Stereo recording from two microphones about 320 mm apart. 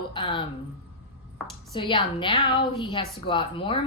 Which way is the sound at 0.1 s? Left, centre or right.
Centre.